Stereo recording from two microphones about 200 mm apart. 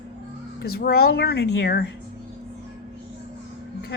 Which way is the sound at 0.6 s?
50° left (ahead or behind).